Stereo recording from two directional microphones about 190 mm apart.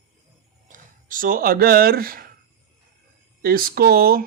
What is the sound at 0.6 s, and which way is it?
Speech, 45° right (ahead or behind).